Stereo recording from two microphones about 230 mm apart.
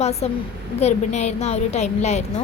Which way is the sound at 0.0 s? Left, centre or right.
Left.